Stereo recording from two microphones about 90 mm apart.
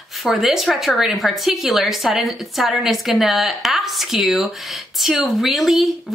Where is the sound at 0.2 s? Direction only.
5° right (ahead or behind).